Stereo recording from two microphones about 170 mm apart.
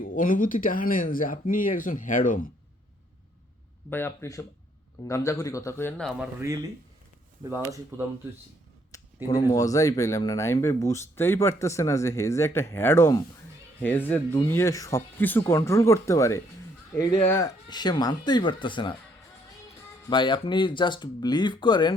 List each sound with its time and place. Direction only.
0.0 s speech: 55° left (ahead or behind)
3.8 s speech: 15° left (ahead or behind)
6.0 s speech: centre (ahead or behind)
7.7 s speech: 15° right (ahead or behind)
9.2 s speech: 25° left (ahead or behind)
20.1 s speech: 25° left (ahead or behind)